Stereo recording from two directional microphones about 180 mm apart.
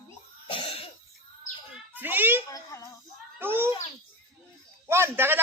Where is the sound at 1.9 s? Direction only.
10° right (ahead or behind).